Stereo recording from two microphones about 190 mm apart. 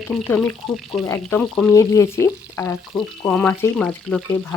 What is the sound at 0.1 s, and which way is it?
Speech, centre (ahead or behind).